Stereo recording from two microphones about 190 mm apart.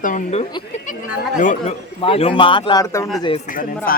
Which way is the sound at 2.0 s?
30° left (ahead or behind).